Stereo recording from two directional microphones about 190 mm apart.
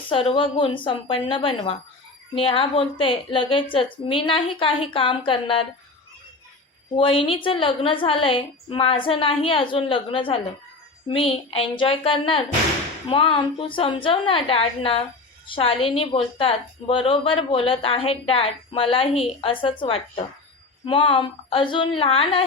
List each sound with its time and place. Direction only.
0.1 s a woman's voice: 30° left (ahead or behind)
6.9 s a woman's voice: 30° left (ahead or behind)